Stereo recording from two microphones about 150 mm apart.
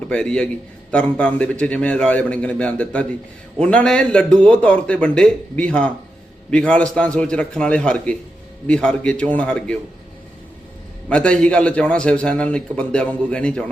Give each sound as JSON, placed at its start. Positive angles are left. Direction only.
{"t": 0.1, "sound": "a man's voice", "side_deg": 5}
{"t": 11.1, "sound": "a man's voice", "side_deg": 5}